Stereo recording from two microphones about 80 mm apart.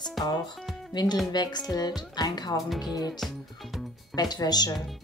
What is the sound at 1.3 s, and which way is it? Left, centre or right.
Speech, left.